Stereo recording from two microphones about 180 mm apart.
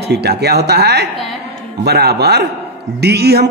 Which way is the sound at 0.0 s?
65° right (ahead or behind).